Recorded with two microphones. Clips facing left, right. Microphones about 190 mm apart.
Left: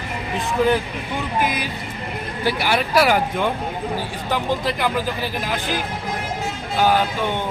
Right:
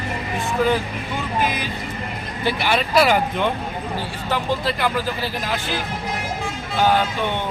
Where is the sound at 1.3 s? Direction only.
15° left (ahead or behind).